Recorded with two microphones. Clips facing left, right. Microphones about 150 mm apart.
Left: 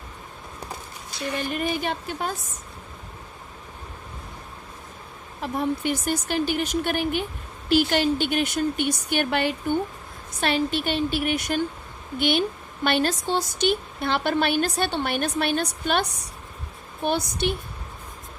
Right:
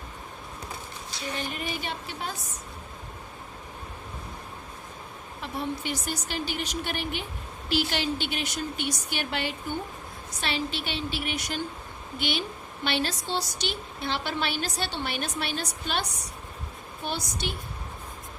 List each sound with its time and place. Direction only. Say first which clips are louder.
1.5 s a woman's voice: left 7 dB; 50° left (ahead or behind)
5.4 s a woman's voice: left 7 dB; 50° left (ahead or behind)